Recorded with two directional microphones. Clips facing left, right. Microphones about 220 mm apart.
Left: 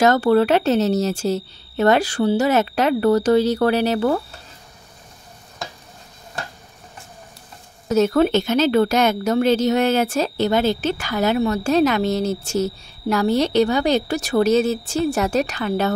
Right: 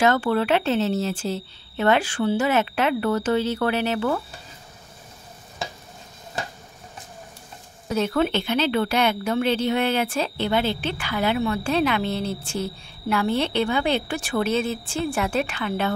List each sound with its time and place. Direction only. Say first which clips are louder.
0.0 s a woman's voice: left 5 dB; 40° left (ahead or behind)
7.9 s a woman's voice: left 6 dB; 45° left (ahead or behind)